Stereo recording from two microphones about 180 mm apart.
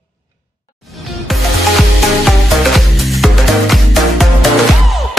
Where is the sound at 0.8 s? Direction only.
Centre (ahead or behind).